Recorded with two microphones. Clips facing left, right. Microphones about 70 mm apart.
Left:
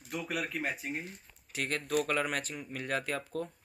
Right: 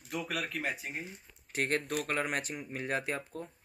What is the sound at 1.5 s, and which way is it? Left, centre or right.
Speech, right.